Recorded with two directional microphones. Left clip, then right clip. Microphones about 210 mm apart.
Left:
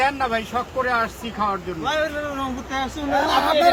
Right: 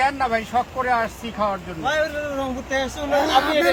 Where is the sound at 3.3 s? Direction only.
30° left (ahead or behind).